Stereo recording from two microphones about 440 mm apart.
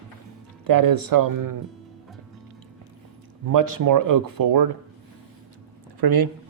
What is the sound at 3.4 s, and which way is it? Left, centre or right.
Speech, right.